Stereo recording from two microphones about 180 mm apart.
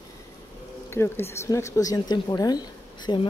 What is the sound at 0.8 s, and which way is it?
Speech, 15° left (ahead or behind).